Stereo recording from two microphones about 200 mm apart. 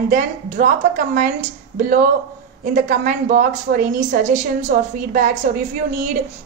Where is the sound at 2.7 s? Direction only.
40° right (ahead or behind).